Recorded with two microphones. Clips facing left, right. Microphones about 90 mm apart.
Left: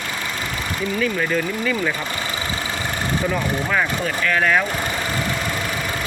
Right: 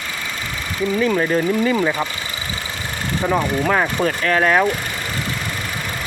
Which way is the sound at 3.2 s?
35° right (ahead or behind).